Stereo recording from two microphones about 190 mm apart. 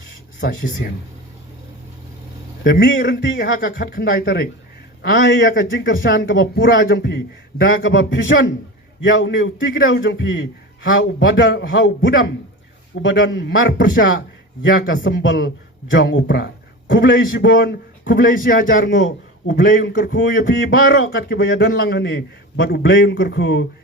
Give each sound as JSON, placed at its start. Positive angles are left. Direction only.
{"t": 0.4, "sound": "a man's voice", "side_deg": 50}
{"t": 2.6, "sound": "a man's voice", "side_deg": 50}
{"t": 5.1, "sound": "speech", "side_deg": 80}
{"t": 6.1, "sound": "a man's voice", "side_deg": 55}
{"t": 6.3, "sound": "a man's voice", "side_deg": 65}
{"t": 7.6, "sound": "a man's voice", "side_deg": 50}
{"t": 7.9, "sound": "a man's voice", "side_deg": 75}
{"t": 10.8, "sound": "a man's voice", "side_deg": 90}
{"t": 13.0, "sound": "a man's voice", "side_deg": 85}
{"t": 18.3, "sound": "a man's voice", "side_deg": 45}
{"t": 19.0, "sound": "a man's voice", "side_deg": 70}
{"t": 19.9, "sound": "a man's voice", "side_deg": 50}
{"t": 20.6, "sound": "a man's voice", "side_deg": 75}